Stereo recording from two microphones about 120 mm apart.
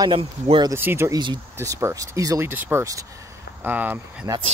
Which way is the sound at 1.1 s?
40° right (ahead or behind).